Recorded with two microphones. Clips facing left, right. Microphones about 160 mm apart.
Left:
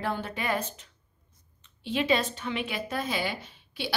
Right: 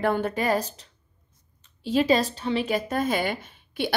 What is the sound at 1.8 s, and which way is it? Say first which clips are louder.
A woman's voice: right 5 dB; 40° right (ahead or behind).